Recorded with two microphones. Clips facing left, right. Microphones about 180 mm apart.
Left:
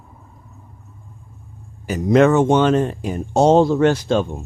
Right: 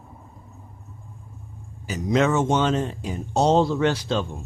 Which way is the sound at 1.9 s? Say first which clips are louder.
Left 7 dB; 55° left (ahead or behind).